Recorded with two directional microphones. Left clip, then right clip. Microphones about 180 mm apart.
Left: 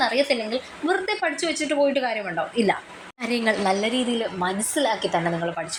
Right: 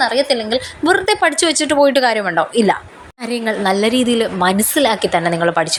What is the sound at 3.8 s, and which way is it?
Speech, 30° right (ahead or behind).